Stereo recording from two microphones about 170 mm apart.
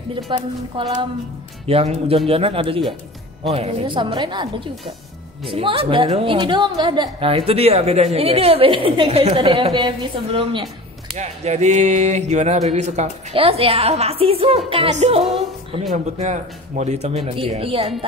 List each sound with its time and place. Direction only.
0.1 s a woman's voice: 30° right (ahead or behind)